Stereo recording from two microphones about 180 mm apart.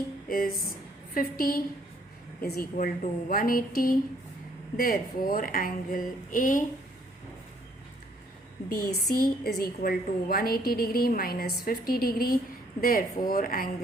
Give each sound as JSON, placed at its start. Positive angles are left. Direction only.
{"t": 0.3, "sound": "a woman's voice", "side_deg": 50}
{"t": 8.7, "sound": "a woman's voice", "side_deg": 60}